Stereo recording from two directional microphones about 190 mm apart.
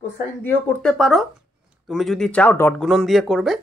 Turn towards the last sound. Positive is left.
turn(degrees=0)  # may be behind; listen again after turning